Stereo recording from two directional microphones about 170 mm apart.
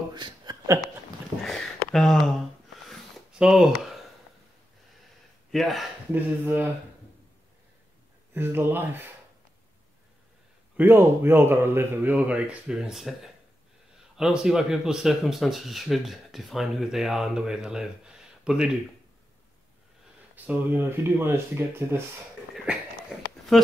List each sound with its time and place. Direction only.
0.1 s a sound: 25° right (ahead or behind)
1.4 s a sound: centre (ahead or behind)
5.5 s speech: centre (ahead or behind)
6.4 s a man's voice: 10° right (ahead or behind)
8.3 s a man's voice: 10° right (ahead or behind)
10.8 s a man's voice: 15° right (ahead or behind)
20.3 s a man's voice: 10° right (ahead or behind)
23.5 s speech: centre (ahead or behind)